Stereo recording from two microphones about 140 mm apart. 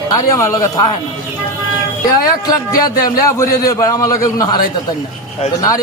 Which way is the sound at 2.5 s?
25° left (ahead or behind).